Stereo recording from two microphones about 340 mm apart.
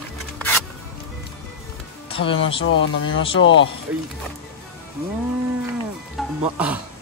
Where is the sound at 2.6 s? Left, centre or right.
Left.